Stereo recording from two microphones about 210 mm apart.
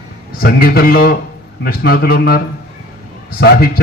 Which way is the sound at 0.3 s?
45° left (ahead or behind).